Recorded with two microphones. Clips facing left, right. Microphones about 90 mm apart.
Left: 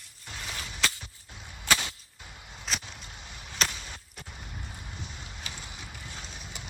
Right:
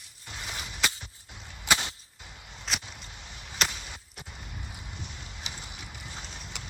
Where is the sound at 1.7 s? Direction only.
25° right (ahead or behind).